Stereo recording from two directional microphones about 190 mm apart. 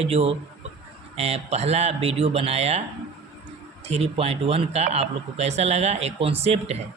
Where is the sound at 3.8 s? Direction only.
35° right (ahead or behind).